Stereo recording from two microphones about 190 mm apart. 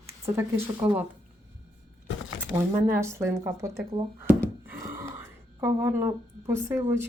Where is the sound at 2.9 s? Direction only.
15° right (ahead or behind).